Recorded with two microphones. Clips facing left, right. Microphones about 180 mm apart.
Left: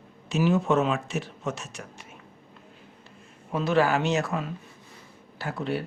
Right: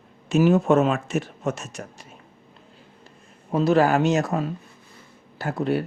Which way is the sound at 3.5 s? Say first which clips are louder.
Right 5 dB; 40° right (ahead or behind).